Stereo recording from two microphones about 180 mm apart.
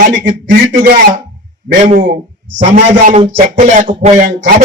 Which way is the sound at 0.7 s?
45° right (ahead or behind).